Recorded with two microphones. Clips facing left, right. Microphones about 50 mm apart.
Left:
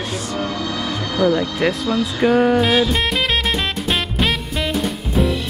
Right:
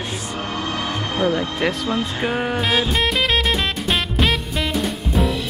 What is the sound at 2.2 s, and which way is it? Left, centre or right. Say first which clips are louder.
Music: left 7 dB; centre.